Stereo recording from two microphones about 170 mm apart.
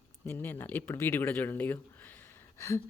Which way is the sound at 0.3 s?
10° left (ahead or behind).